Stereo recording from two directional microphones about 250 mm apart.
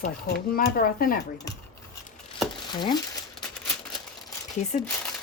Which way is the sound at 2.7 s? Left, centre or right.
Centre.